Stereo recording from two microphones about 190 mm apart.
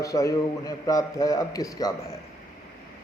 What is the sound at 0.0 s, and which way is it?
A man's voice, 15° left (ahead or behind).